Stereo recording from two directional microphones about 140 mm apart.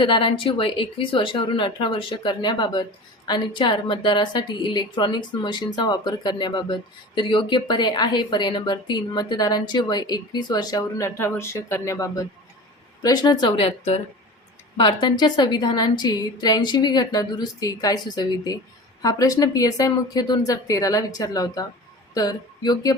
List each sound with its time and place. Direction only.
0.0 s a woman's voice: 35° left (ahead or behind)
14.8 s a woman's voice: 35° left (ahead or behind)